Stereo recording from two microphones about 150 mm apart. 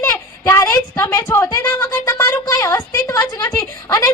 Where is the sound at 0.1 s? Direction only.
20° left (ahead or behind).